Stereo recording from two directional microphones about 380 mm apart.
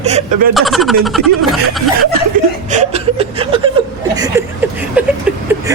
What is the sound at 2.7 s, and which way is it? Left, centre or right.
Chuckle, centre.